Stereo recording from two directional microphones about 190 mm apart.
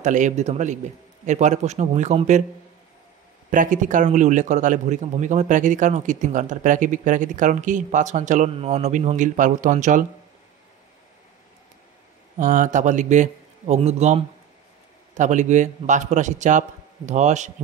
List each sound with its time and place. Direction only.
0.0 s a man's voice: 40° right (ahead or behind)
3.4 s a man's voice: 45° right (ahead or behind)
12.4 s a man's voice: 40° right (ahead or behind)